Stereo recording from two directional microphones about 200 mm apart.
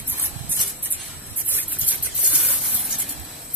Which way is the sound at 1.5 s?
10° right (ahead or behind).